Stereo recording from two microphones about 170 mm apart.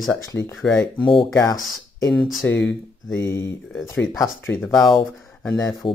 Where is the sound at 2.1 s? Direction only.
Centre (ahead or behind).